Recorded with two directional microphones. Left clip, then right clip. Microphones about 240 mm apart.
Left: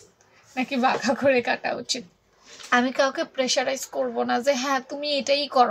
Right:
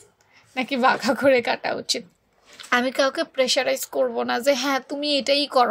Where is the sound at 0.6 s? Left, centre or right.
Right.